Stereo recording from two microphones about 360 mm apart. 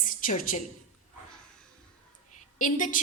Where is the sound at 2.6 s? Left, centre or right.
Left.